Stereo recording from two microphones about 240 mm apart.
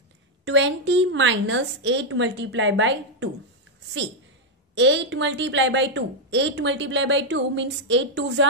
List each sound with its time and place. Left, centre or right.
0.5 s a woman's voice: right
4.7 s a woman's voice: right